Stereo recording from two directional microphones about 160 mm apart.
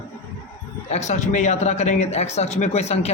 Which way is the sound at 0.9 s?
45° left (ahead or behind).